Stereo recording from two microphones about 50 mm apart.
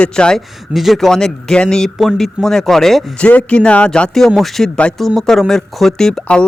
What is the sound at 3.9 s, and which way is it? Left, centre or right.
A man's voice, centre.